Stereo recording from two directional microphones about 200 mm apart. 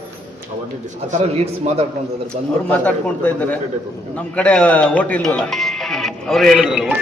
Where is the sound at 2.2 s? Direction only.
5° left (ahead or behind).